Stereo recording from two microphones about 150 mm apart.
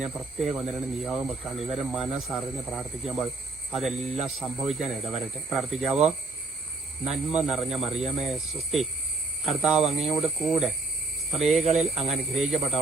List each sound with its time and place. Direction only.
0.0 s speech: centre (ahead or behind)
11.6 s speech: 45° right (ahead or behind)
12.0 s speech: centre (ahead or behind)